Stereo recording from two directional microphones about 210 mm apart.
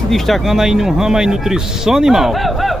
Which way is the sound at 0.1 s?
Centre (ahead or behind).